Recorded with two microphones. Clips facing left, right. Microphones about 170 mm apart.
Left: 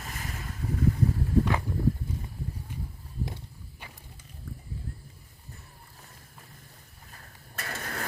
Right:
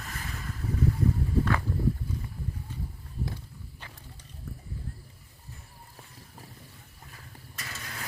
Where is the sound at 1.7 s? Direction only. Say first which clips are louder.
Even; 15° left (ahead or behind).